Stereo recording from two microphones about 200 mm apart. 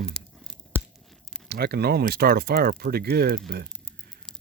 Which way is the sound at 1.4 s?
55° right (ahead or behind).